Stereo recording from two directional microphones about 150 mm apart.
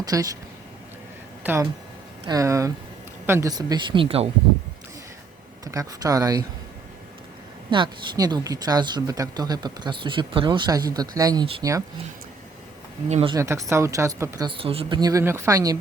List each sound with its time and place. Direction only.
0.0 s speech: 25° right (ahead or behind)
2.2 s speech: 20° right (ahead or behind); by 4.3 s 40° right (ahead or behind)
5.6 s speech: 25° right (ahead or behind)
7.7 s speech: 30° right (ahead or behind)
13.1 s speech: 45° right (ahead or behind)
13.3 s speech: 20° right (ahead or behind)
14.4 s speech: 35° right (ahead or behind)